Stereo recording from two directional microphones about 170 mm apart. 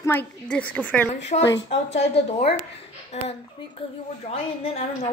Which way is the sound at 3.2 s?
40° left (ahead or behind).